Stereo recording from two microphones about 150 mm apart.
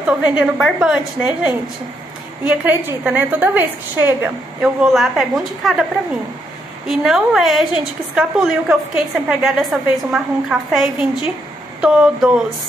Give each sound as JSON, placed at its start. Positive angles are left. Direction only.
{"t": 0.0, "sound": "a woman's voice", "side_deg": -10}
{"t": 4.8, "sound": "a woman's voice", "side_deg": 0}
{"t": 6.9, "sound": "a woman's voice", "side_deg": -5}